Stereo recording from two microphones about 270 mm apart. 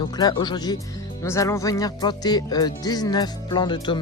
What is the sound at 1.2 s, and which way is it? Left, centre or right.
Speech, centre.